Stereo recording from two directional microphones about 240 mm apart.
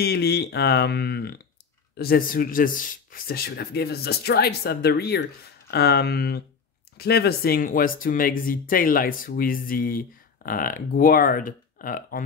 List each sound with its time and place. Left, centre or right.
0.0 s speech: left